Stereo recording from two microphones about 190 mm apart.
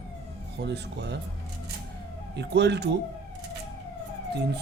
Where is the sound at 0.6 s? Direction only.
60° right (ahead or behind).